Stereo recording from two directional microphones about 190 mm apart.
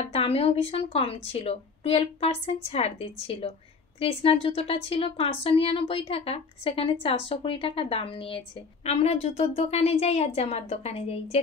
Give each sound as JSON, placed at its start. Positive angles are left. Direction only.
{"t": 0.0, "sound": "a woman's voice", "side_deg": 30}